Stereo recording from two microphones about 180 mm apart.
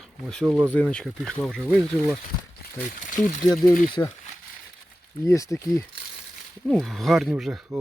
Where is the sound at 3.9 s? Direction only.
25° left (ahead or behind).